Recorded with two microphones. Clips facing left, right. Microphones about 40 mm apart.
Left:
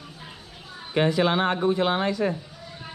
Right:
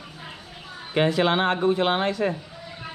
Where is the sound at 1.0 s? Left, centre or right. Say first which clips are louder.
Right 1 dB; right.